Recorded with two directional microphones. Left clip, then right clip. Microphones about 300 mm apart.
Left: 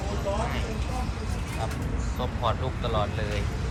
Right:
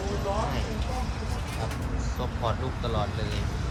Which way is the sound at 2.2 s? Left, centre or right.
Centre.